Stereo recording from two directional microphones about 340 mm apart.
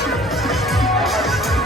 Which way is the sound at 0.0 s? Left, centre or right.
Centre.